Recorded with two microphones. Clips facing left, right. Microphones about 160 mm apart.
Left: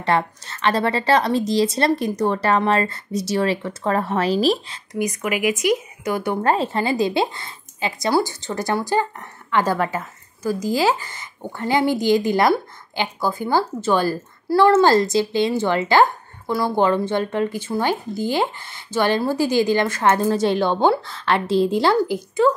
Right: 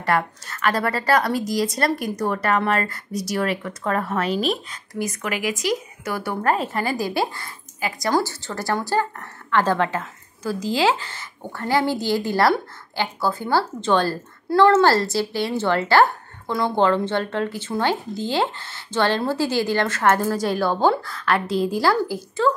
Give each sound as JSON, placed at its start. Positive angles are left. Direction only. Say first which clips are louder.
{"t": 0.0, "sound": "speech", "louder": "left 2 dB", "side_deg": 25}
{"t": 5.2, "sound": "a woman's voice", "louder": "left 5 dB", "side_deg": 10}